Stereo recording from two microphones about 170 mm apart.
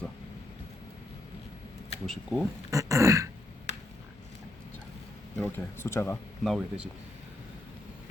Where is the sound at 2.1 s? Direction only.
5° right (ahead or behind).